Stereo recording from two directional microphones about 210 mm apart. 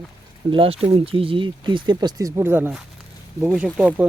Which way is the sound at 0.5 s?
25° right (ahead or behind).